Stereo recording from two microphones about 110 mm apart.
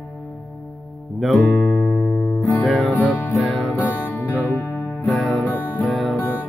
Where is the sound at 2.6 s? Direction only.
Centre (ahead or behind).